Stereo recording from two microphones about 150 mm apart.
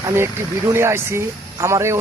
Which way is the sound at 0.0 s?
20° right (ahead or behind).